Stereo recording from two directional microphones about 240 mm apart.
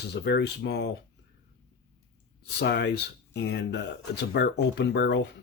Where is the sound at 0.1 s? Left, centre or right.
Left.